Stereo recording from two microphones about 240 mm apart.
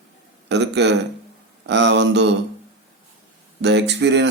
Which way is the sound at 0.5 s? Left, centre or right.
Right.